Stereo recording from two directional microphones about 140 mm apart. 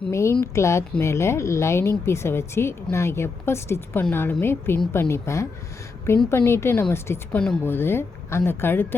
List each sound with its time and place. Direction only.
0.1 s a woman's voice: 20° left (ahead or behind)